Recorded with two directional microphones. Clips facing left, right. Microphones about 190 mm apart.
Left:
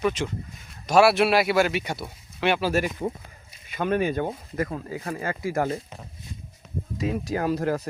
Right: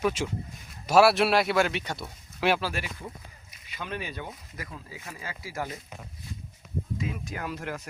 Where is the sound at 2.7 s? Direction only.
45° left (ahead or behind).